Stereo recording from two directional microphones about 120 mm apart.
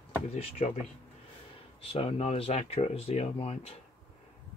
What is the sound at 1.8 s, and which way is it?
Speech, 55° left (ahead or behind).